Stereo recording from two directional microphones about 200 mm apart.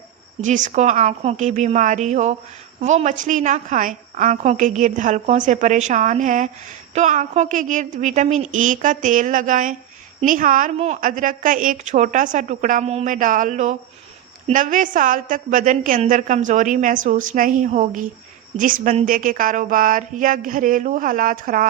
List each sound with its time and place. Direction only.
0.4 s a woman's voice: 40° right (ahead or behind)